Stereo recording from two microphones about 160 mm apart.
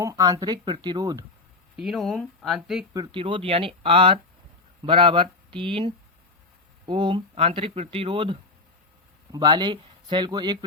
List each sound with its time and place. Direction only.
0.0 s speech: 20° right (ahead or behind)
1.7 s speech: 5° right (ahead or behind)
2.9 s speech: 25° right (ahead or behind)